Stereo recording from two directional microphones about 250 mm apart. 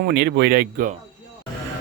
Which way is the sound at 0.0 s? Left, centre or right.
Right.